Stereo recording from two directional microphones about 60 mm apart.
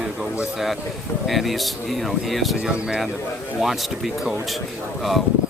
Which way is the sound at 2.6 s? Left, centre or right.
Centre.